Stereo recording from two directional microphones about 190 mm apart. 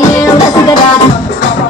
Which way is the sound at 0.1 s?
15° left (ahead or behind).